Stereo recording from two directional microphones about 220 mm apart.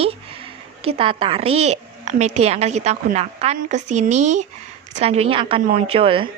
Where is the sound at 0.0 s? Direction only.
25° right (ahead or behind).